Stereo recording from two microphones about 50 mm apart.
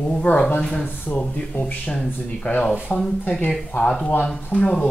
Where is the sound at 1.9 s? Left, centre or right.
Left.